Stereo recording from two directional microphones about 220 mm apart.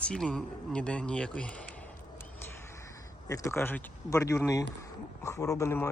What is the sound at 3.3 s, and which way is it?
Speech, 15° left (ahead or behind).